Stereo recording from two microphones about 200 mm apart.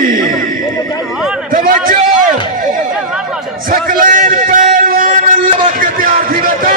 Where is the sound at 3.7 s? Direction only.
45° right (ahead or behind).